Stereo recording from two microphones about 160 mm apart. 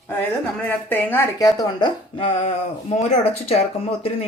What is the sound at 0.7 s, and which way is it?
Speech, 10° left (ahead or behind).